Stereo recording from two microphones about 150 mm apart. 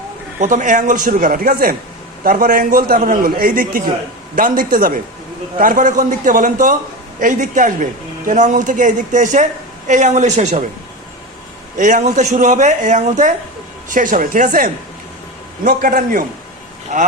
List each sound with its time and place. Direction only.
0.3 s a woman's voice: 55° right (ahead or behind)
11.8 s a woman's voice: 55° right (ahead or behind)
16.9 s a woman's voice: 55° right (ahead or behind)